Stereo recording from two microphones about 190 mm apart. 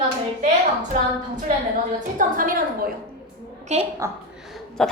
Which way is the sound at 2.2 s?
45° right (ahead or behind).